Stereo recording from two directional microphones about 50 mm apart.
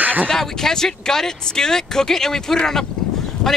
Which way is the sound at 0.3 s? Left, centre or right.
Centre.